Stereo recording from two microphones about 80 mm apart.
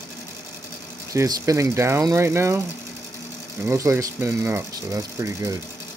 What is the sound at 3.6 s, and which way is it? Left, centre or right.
Speech, right.